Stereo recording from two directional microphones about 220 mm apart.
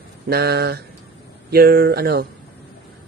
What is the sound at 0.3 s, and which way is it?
Speech, 45° right (ahead or behind).